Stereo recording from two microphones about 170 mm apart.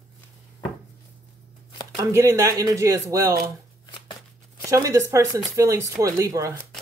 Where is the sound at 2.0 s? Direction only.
15° right (ahead or behind).